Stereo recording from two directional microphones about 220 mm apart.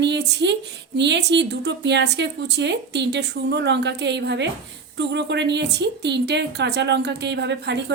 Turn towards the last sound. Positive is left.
turn(degrees=-50)  # may be behind; listen again after turning